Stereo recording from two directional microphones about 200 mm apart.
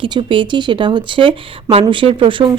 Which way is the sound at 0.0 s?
25° right (ahead or behind).